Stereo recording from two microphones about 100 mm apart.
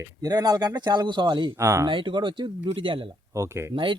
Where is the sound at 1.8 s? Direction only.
55° right (ahead or behind).